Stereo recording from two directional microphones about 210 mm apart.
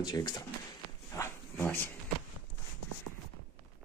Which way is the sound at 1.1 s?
10° left (ahead or behind).